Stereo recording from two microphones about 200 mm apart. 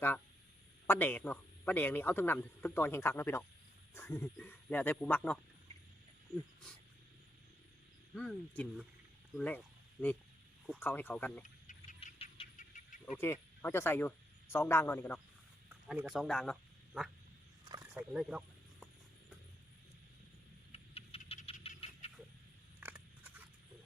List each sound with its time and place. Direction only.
0.9 s a man's voice: 10° left (ahead or behind)
8.1 s speech: centre (ahead or behind)
10.8 s a man's voice: 10° left (ahead or behind)
12.0 s insect: 35° left (ahead or behind)
13.1 s a man's voice: 10° left (ahead or behind)
15.7 s a sound: 10° right (ahead or behind)
16.1 s speech: centre (ahead or behind)
17.7 s wild animals: 15° right (ahead or behind)
18.1 s a sound: 5° right (ahead or behind)
20.7 s patter: 30° left (ahead or behind)
22.8 s scissors: 10° right (ahead or behind)